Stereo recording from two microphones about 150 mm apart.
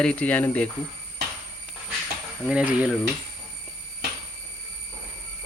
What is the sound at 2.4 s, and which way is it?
Speech, 10° right (ahead or behind).